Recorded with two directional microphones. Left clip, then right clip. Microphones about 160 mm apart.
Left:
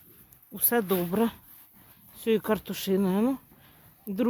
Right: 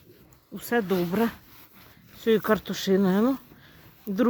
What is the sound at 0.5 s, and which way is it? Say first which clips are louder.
Speech: right 1 dB; 20° left (ahead or behind).